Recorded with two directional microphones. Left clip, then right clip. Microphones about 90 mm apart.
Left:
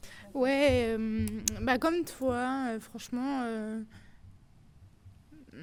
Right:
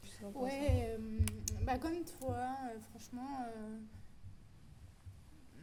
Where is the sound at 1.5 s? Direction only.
45° left (ahead or behind).